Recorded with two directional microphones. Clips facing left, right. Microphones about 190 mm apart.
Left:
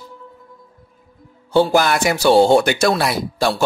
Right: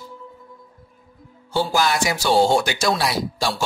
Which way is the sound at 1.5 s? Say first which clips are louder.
Left 6 dB; 60° left (ahead or behind).